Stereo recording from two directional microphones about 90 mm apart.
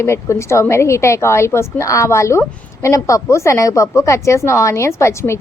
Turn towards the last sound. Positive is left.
turn(degrees=30)  # may be behind; listen again after turning